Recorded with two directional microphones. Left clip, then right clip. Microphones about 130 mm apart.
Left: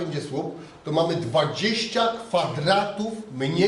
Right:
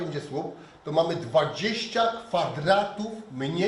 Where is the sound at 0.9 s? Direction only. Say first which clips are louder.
Left 2 dB; 15° left (ahead or behind).